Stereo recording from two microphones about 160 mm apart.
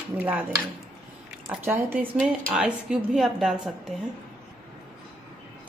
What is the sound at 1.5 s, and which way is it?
A woman's voice, 10° right (ahead or behind).